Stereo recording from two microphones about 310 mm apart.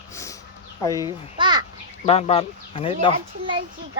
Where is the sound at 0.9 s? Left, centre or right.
Centre.